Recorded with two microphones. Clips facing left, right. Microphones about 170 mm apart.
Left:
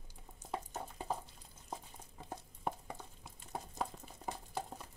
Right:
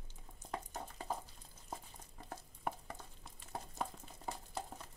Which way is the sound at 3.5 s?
5° left (ahead or behind).